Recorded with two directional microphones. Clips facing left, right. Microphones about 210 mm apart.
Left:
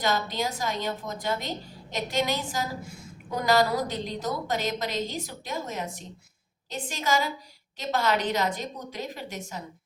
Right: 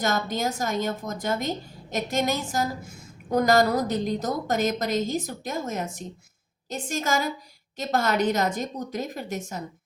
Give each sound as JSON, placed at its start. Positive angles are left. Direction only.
{"t": 0.0, "sound": "a woman's voice", "side_deg": -45}